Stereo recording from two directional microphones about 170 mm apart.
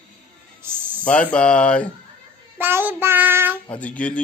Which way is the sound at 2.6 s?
15° right (ahead or behind).